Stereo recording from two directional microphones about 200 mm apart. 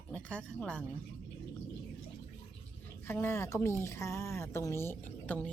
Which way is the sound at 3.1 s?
10° left (ahead or behind).